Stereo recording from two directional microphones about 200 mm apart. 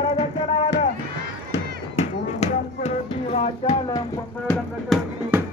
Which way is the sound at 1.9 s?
35° left (ahead or behind).